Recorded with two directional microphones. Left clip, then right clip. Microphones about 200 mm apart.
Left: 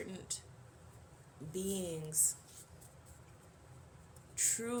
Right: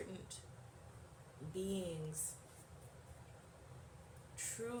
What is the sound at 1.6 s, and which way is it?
Speech, 50° left (ahead or behind).